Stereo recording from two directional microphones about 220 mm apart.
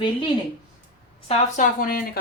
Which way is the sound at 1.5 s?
40° left (ahead or behind).